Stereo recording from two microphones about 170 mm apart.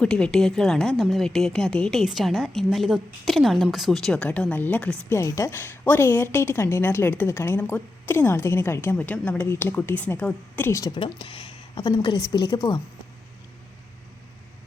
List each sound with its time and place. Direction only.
0.0 s a woman's voice: 5° left (ahead or behind); by 12.8 s 25° left (ahead or behind)